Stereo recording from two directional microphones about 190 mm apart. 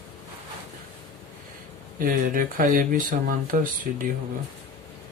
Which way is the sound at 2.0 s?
45° right (ahead or behind).